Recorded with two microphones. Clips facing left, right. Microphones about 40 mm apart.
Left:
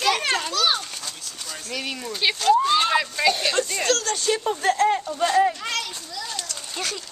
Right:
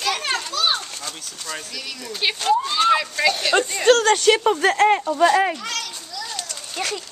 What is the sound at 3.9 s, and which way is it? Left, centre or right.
Speech, right.